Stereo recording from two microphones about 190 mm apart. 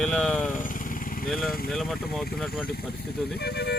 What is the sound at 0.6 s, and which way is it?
Vehicle, 45° left (ahead or behind).